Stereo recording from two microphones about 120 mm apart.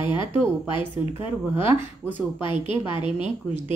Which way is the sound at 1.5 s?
15° right (ahead or behind).